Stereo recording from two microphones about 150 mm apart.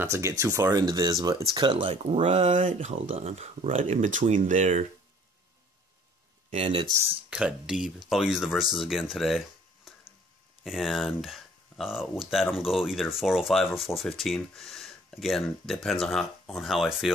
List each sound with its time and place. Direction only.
0.0 s speech: 20° right (ahead or behind); by 2.1 s 35° right (ahead or behind)
2.1 s speech: 45° right (ahead or behind)
4.0 s speech: 60° right (ahead or behind)
6.5 s speech: 40° right (ahead or behind)
7.2 s speech: 5° right (ahead or behind)
9.9 s a sound: centre (ahead or behind)
10.6 s speech: centre (ahead or behind)